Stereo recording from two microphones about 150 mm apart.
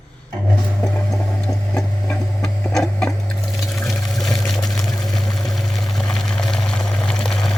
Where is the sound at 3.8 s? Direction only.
Centre (ahead or behind).